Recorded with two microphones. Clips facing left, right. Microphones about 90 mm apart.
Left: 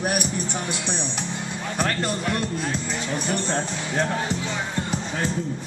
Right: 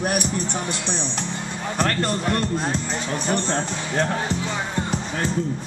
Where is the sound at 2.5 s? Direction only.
30° right (ahead or behind).